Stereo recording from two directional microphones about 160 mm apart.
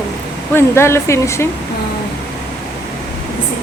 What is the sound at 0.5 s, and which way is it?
Speech, 15° left (ahead or behind).